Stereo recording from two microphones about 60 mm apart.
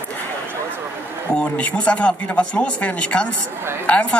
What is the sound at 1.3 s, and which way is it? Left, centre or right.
A man's voice, centre.